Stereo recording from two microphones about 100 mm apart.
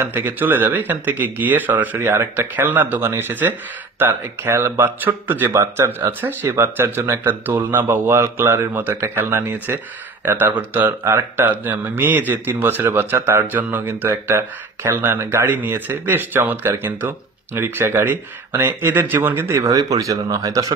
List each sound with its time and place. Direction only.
0.0 s speech: 20° right (ahead or behind)